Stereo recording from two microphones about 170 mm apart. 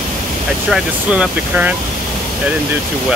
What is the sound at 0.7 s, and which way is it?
Speech, 5° right (ahead or behind).